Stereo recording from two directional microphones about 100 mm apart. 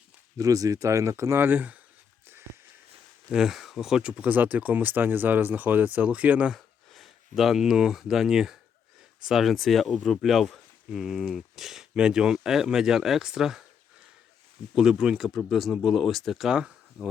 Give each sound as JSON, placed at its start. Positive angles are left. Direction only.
{"t": 0.3, "sound": "speech", "side_deg": -35}
{"t": 3.2, "sound": "speech", "side_deg": -5}
{"t": 6.9, "sound": "speech", "side_deg": 0}
{"t": 14.8, "sound": "speech", "side_deg": -5}